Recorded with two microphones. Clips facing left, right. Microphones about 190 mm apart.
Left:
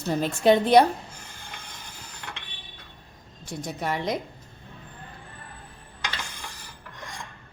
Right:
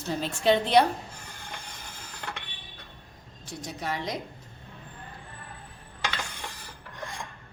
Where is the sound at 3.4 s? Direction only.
50° left (ahead or behind).